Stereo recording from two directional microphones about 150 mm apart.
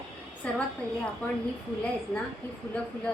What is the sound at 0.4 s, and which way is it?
Speech, 10° left (ahead or behind).